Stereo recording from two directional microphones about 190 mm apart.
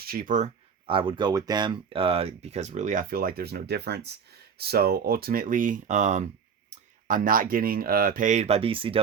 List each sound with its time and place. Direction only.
0.0 s speech: 50° right (ahead or behind)
0.9 s speech: 25° right (ahead or behind)